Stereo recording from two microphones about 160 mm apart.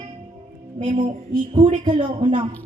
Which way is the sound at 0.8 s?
40° right (ahead or behind).